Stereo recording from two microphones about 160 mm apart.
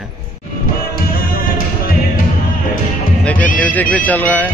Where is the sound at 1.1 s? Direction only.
65° left (ahead or behind).